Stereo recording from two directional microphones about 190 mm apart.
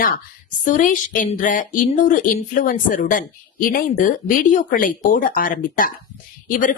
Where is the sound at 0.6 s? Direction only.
45° left (ahead or behind).